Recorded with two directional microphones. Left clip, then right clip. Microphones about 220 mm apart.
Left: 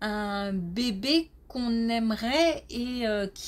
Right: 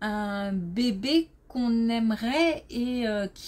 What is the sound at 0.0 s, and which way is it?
Speech, 25° left (ahead or behind).